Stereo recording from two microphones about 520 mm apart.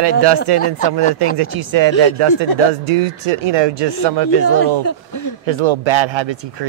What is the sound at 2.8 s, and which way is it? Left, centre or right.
Speech, right.